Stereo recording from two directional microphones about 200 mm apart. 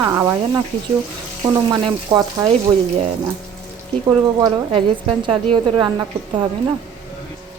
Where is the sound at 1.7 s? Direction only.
20° right (ahead or behind).